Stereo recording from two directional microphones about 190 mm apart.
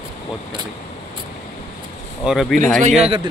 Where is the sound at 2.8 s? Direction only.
35° right (ahead or behind).